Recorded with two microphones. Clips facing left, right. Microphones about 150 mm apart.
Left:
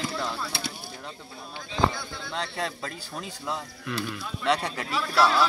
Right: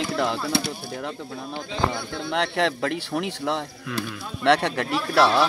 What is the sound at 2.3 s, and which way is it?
Speech, 75° right (ahead or behind).